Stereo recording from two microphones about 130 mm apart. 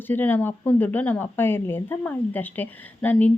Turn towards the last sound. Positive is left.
turn(degrees=10)  # may be behind; listen again after turning